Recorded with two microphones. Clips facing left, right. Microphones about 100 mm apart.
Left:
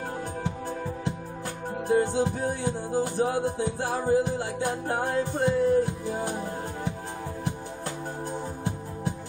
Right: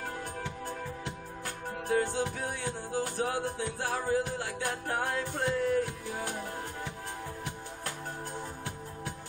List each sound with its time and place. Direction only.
0.4 s music: 30° left (ahead or behind)